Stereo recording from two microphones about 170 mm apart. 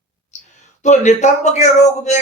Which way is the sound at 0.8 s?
45° left (ahead or behind).